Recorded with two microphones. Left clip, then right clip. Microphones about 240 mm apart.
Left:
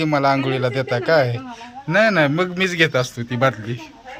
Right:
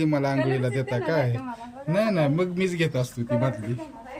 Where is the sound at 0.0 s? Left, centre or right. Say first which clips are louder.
Left 7 dB; centre.